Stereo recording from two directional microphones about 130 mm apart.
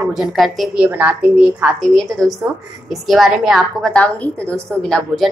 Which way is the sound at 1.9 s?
Centre (ahead or behind).